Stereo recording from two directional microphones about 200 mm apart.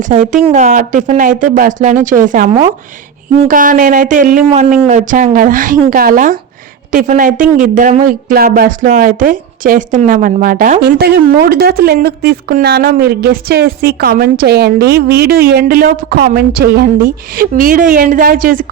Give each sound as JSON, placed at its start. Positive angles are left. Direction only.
{"t": 0.1, "sound": "speech", "side_deg": -30}